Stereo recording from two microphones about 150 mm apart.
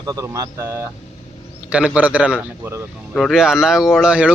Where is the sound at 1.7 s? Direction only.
5° right (ahead or behind).